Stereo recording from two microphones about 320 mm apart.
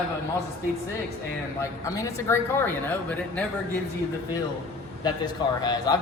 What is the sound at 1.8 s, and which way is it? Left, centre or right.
Speech, centre.